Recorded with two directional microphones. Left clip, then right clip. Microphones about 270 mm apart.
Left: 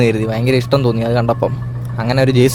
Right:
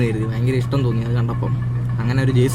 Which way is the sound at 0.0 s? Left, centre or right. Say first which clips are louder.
Left 8 dB; left.